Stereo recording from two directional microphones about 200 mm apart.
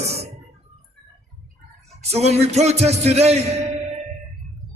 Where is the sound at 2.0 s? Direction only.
30° right (ahead or behind).